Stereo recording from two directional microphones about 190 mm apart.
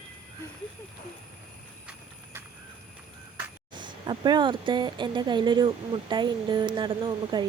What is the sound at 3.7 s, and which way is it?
Speech, 25° right (ahead or behind).